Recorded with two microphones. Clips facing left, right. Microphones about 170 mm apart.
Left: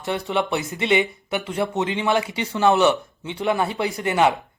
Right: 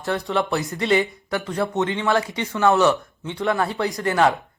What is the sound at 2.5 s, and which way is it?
Speech, 20° left (ahead or behind).